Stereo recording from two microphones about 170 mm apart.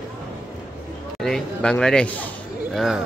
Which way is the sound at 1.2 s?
5° left (ahead or behind).